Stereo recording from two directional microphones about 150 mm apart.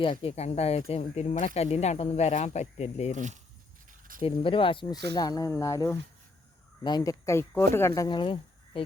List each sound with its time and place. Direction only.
0.0 s speech: 40° left (ahead or behind)
4.2 s speech: 40° left (ahead or behind)